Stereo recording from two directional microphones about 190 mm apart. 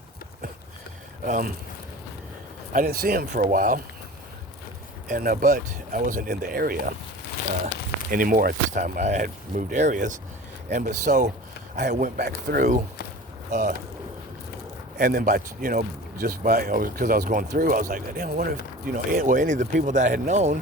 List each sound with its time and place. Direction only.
1.2 s speech: 45° right (ahead or behind)
2.7 s speech: 50° right (ahead or behind)
5.0 s speech: 50° right (ahead or behind)
8.1 s speech: 45° right (ahead or behind)
14.9 s speech: 45° right (ahead or behind)